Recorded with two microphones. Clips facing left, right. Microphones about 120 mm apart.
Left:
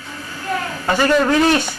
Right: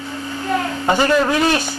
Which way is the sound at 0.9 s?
20° right (ahead or behind).